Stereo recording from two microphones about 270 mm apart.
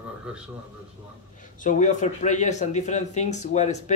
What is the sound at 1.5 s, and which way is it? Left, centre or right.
Speech, left.